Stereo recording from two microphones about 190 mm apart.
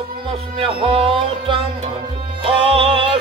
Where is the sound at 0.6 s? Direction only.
30° right (ahead or behind).